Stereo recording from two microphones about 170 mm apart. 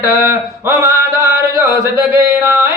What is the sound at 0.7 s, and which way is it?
Speech, 20° right (ahead or behind).